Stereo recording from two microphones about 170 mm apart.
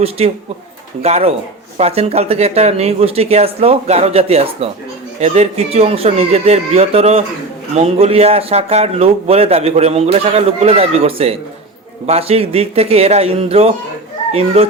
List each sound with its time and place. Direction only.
0.2 s a man's voice: 35° right (ahead or behind)